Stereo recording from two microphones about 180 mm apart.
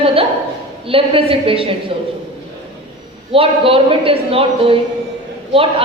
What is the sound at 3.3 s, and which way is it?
A woman's voice, 30° right (ahead or behind).